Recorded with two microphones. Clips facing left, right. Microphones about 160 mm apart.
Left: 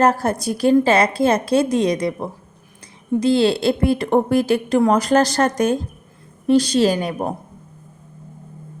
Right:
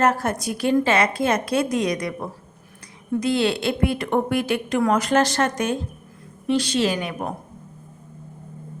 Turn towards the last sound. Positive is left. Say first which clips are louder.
# left 5 dB
turn(degrees=35)  # may be behind; listen again after turning